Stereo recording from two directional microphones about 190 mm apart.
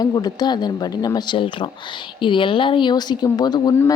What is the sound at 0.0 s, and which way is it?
A woman's voice, 20° left (ahead or behind).